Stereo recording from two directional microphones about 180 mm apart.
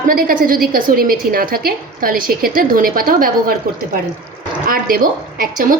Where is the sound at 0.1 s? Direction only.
55° right (ahead or behind).